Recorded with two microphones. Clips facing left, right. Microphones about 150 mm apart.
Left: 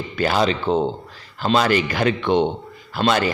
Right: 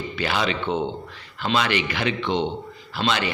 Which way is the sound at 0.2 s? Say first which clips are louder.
Left 6 dB; 40° left (ahead or behind).